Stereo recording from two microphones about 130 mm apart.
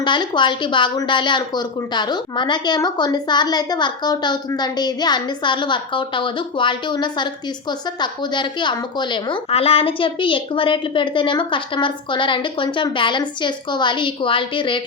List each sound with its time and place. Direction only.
0.0 s speech: 35° left (ahead or behind)